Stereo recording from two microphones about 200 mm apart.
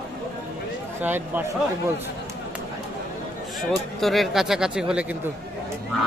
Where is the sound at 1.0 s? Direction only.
10° right (ahead or behind).